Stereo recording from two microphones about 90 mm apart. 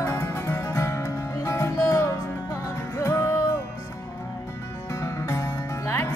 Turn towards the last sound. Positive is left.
turn(degrees=30)  # may be behind; listen again after turning